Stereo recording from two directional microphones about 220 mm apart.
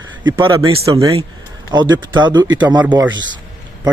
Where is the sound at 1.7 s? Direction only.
20° right (ahead or behind).